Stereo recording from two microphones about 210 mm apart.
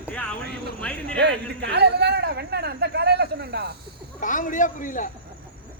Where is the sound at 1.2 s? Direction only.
55° right (ahead or behind).